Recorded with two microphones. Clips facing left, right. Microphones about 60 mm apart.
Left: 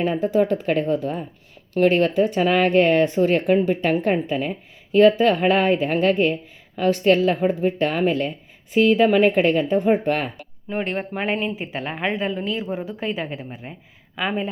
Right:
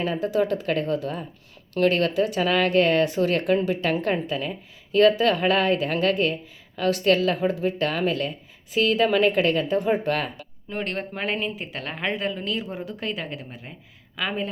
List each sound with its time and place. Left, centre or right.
0.0 s speech: left
10.7 s speech: centre